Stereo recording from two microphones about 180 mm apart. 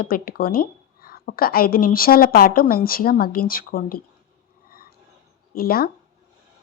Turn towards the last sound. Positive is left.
turn(degrees=55)  # may be behind; listen again after turning